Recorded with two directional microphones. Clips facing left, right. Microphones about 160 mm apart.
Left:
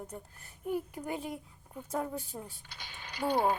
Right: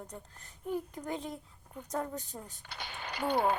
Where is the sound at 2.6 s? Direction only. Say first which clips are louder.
Right 6 dB; 65° right (ahead or behind).